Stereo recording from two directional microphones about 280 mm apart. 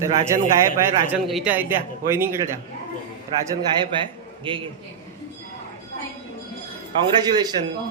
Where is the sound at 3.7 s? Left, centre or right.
Centre.